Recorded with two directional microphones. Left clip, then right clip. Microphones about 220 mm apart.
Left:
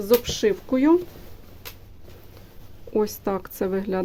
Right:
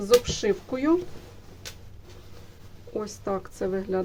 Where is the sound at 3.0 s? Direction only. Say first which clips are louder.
Left 6 dB; 50° left (ahead or behind).